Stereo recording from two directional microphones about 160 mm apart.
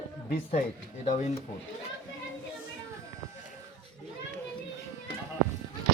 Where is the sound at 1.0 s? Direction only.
45° left (ahead or behind).